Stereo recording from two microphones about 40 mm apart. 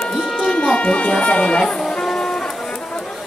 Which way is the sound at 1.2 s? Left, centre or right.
Left.